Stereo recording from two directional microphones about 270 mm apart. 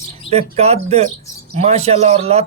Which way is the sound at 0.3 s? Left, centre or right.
Right.